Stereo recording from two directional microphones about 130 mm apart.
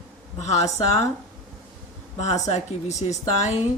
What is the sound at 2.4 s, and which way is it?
Speech, 60° left (ahead or behind).